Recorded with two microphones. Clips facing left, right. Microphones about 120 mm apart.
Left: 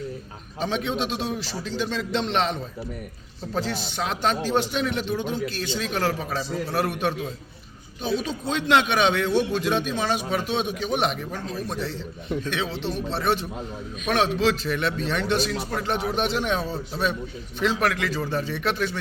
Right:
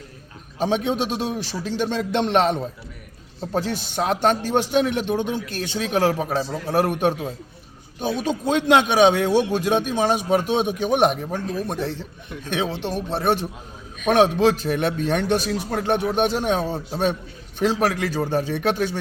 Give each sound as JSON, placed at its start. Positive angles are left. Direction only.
{"t": 0.6, "sound": "a man's voice", "side_deg": -45}